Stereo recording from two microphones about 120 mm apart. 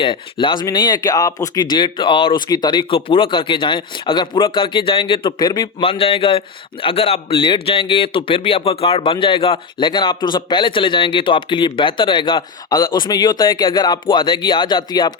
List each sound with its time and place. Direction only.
0.0 s speech: 40° left (ahead or behind)
5.8 s a man's voice: 50° left (ahead or behind)
7.3 s speech: 40° left (ahead or behind)